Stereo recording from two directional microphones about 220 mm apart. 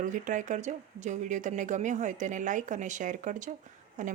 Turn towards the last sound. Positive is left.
turn(degrees=-35)  # may be behind; listen again after turning